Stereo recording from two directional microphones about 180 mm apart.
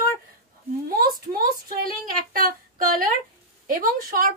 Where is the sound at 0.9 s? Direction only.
55° right (ahead or behind).